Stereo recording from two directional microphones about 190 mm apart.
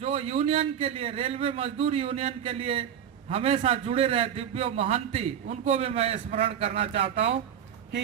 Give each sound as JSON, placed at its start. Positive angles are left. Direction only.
{"t": 0.0, "sound": "a man's voice", "side_deg": -30}